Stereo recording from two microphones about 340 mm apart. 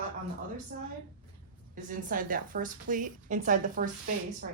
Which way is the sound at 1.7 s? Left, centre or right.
Right.